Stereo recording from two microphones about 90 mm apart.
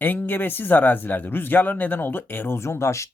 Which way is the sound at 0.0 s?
20° left (ahead or behind).